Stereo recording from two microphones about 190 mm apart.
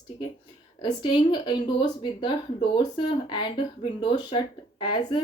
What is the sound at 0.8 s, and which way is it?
Speech, 25° left (ahead or behind).